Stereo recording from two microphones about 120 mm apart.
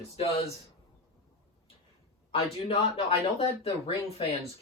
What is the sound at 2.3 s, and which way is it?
Speech, 50° left (ahead or behind).